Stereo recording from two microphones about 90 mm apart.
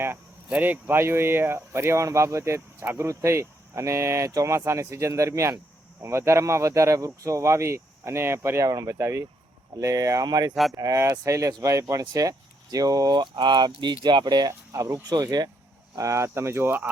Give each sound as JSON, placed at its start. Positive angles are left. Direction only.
{"t": 0.5, "sound": "speech", "side_deg": -20}
{"t": 10.5, "sound": "speech", "side_deg": 0}
{"t": 10.8, "sound": "speech", "side_deg": -35}
{"t": 14.7, "sound": "speech", "side_deg": -40}
{"t": 15.1, "sound": "speech", "side_deg": -50}
{"t": 16.0, "sound": "speech", "side_deg": -35}